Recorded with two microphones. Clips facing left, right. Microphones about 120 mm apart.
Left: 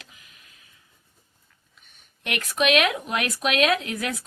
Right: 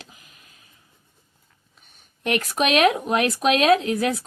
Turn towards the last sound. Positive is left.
turn(degrees=-35)  # may be behind; listen again after turning